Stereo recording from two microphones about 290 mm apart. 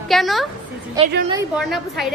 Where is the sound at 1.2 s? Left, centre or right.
Centre.